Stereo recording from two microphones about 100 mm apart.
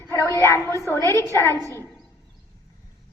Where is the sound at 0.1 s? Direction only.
30° left (ahead or behind).